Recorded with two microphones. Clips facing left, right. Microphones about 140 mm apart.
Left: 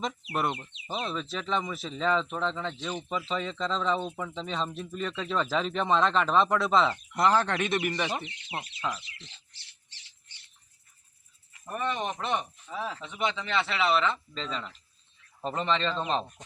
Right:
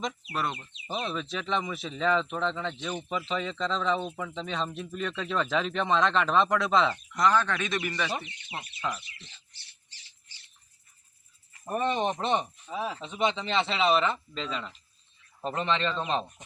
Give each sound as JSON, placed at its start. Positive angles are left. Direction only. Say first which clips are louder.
{"t": 0.3, "sound": "speech", "louder": "left 5 dB", "side_deg": 20}
{"t": 0.9, "sound": "speech", "louder": "right 1 dB", "side_deg": 0}
{"t": 7.1, "sound": "speech", "louder": "left 1 dB", "side_deg": 30}
{"t": 9.0, "sound": "speech", "louder": "left 1 dB", "side_deg": 90}
{"t": 11.5, "sound": "speech", "louder": "right 4 dB", "side_deg": -30}
{"t": 12.7, "sound": "speech", "louder": "right 2 dB", "side_deg": -15}
{"t": 14.4, "sound": "speech", "louder": "even", "side_deg": -5}